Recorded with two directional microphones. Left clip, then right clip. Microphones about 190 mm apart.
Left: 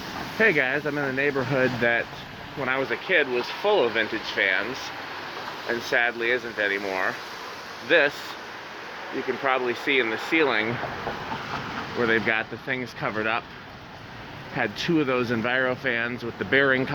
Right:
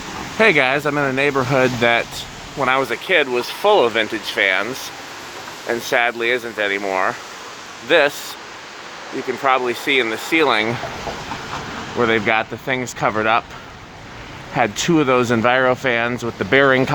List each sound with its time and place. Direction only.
0.3 s speech: 25° right (ahead or behind)
5.6 s speech: 30° right (ahead or behind)
9.4 s speech: 25° right (ahead or behind)
11.9 s speech: 25° right (ahead or behind)
14.5 s speech: 35° right (ahead or behind)